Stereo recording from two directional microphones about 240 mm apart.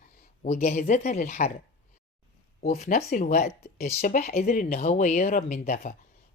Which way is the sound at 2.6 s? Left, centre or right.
Left.